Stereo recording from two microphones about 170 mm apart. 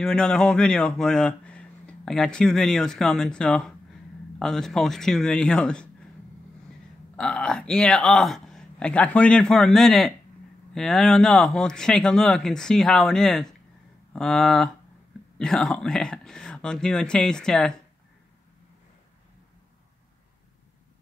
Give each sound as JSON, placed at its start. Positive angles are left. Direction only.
{"t": 0.0, "sound": "speech", "side_deg": 5}
{"t": 7.2, "sound": "speech", "side_deg": 5}